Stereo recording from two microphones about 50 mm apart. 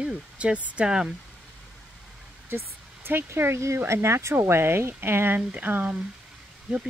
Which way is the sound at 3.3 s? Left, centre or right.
Right.